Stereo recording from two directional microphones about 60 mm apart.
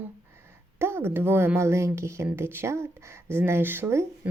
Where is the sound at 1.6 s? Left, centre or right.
Right.